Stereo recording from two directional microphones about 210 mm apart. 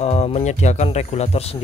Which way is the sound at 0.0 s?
30° left (ahead or behind).